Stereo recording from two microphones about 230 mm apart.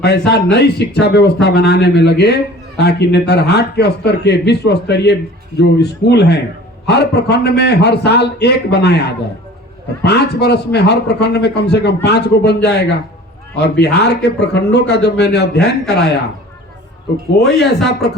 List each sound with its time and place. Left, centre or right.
0.0 s a man's voice: left
17.4 s speech: centre